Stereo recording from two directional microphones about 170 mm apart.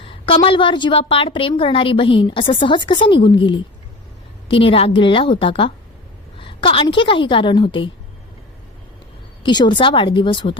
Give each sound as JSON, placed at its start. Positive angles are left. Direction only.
{"t": 0.0, "sound": "a woman's voice", "side_deg": 30}
{"t": 9.4, "sound": "a woman's voice", "side_deg": 25}